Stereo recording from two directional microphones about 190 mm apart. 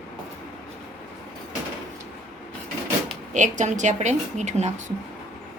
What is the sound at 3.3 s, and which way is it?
A woman's voice, 40° right (ahead or behind).